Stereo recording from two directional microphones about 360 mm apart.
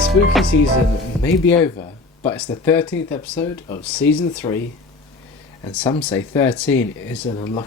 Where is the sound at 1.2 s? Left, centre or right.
Centre.